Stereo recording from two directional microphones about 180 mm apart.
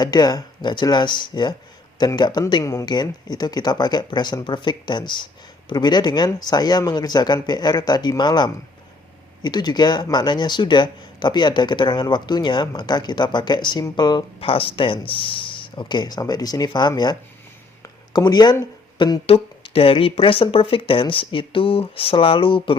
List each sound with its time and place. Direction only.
0.0 s speech: 20° left (ahead or behind)